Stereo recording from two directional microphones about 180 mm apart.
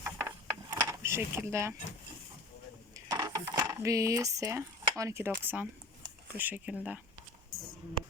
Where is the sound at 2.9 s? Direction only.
20° right (ahead or behind).